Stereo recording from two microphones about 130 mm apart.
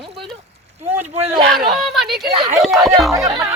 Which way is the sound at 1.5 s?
Centre (ahead or behind).